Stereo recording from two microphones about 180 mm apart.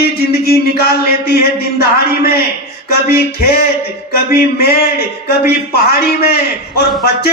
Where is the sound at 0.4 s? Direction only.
60° left (ahead or behind).